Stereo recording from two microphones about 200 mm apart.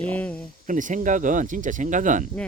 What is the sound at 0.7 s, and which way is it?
Speech, 40° right (ahead or behind).